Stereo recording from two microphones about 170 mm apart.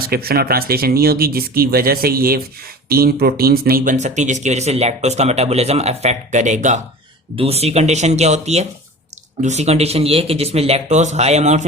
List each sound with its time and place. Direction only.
0.1 s speech: 65° right (ahead or behind); by 11.6 s 40° right (ahead or behind)